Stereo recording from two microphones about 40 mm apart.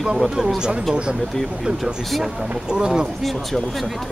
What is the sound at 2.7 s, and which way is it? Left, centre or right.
Speech, centre.